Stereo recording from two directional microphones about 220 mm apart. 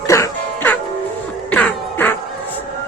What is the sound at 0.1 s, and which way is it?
Music, 10° left (ahead or behind).